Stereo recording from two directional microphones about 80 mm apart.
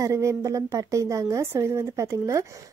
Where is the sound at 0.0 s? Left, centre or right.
Right.